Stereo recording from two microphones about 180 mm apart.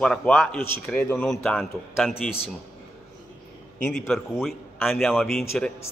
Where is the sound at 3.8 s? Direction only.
Centre (ahead or behind).